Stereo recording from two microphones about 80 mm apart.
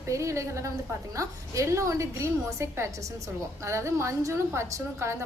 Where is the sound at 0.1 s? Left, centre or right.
Right.